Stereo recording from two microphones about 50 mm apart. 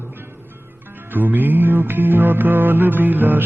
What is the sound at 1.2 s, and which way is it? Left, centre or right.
Music, right.